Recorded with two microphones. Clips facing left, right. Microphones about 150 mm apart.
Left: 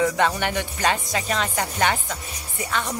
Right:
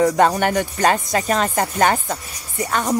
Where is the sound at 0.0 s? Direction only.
40° right (ahead or behind).